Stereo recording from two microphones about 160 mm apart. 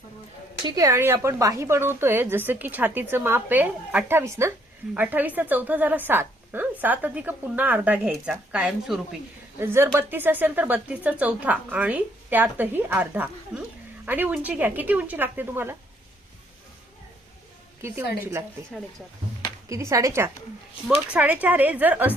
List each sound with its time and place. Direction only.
0.6 s a woman's voice: 20° right (ahead or behind); by 9.0 s 5° right (ahead or behind)
9.6 s a woman's voice: 15° right (ahead or behind)
19.6 s a woman's voice: 20° right (ahead or behind)